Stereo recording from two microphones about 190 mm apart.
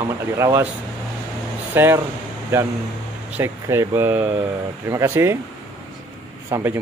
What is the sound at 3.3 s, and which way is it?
Speech, 10° right (ahead or behind).